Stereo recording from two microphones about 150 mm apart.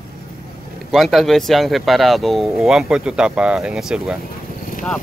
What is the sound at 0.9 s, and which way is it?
Speech, centre (ahead or behind).